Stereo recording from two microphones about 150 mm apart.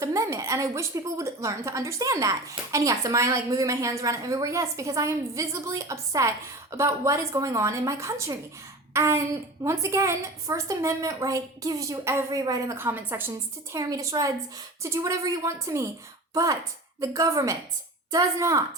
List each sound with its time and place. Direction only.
0.0 s a woman's voice: 20° right (ahead or behind)